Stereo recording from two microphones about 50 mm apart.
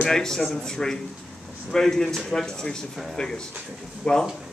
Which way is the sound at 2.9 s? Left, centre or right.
Centre.